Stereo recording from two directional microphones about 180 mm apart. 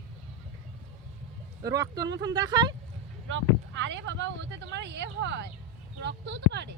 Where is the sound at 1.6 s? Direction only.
20° right (ahead or behind).